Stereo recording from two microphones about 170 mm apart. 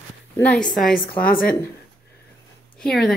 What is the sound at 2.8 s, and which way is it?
Speech, 5° left (ahead or behind).